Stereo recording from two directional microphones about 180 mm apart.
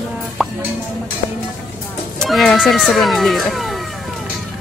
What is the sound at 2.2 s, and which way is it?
Speech, centre (ahead or behind).